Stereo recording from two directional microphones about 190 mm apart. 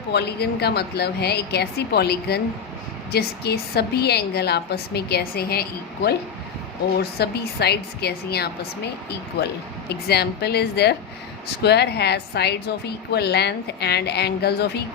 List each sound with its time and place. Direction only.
0.1 s a woman's voice: 60° left (ahead or behind)
10.1 s a woman's voice: 60° left (ahead or behind)